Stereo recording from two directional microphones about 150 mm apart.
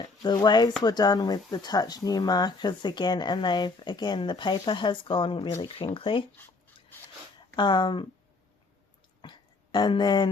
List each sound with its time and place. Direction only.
0.0 s speech: 25° left (ahead or behind)
7.5 s speech: 30° left (ahead or behind)
9.2 s a sound: 30° left (ahead or behind)